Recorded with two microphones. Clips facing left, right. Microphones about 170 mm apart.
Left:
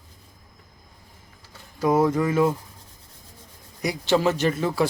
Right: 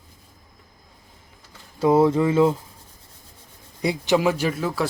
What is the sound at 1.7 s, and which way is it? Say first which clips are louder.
Speech: right 3 dB; 25° right (ahead or behind).